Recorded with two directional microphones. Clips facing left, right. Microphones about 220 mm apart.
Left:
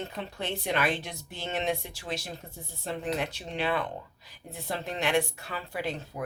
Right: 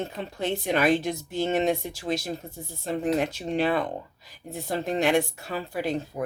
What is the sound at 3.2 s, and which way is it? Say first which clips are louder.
A woman's voice: right 7 dB; 45° right (ahead or behind).